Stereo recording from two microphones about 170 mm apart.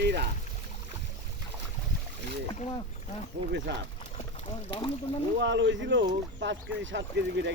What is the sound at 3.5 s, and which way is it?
Speech, 90° right.